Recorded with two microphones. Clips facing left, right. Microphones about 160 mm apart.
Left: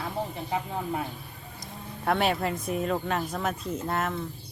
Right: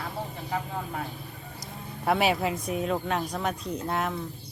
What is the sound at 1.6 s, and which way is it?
Speech, centre (ahead or behind).